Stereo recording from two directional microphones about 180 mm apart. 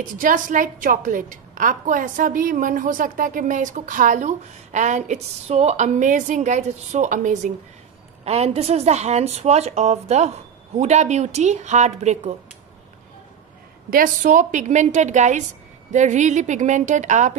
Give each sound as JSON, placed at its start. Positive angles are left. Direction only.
{"t": 0.0, "sound": "a woman's voice", "side_deg": -45}
{"t": 13.8, "sound": "a woman's voice", "side_deg": -50}